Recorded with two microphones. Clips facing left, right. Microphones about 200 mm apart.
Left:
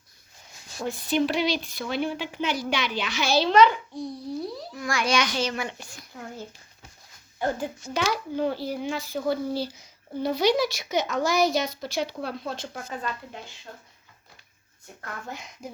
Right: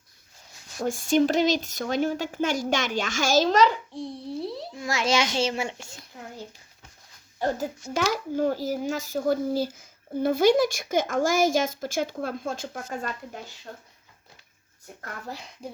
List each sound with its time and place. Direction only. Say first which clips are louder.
0.8 s speech: right 3 dB; 45° right (ahead or behind); by 6.4 s 25° right (ahead or behind)
7.3 s a child's voice: right 1 dB; 40° right (ahead or behind)
15.0 s a child's voice: even; 35° right (ahead or behind)